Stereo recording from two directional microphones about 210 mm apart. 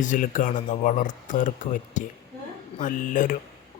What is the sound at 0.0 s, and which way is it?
Speech, 35° left (ahead or behind).